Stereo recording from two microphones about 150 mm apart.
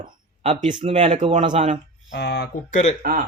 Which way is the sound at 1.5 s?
55° right (ahead or behind).